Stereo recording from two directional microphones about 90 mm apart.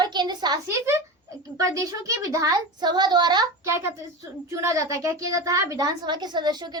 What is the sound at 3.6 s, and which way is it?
Speech, 30° right (ahead or behind).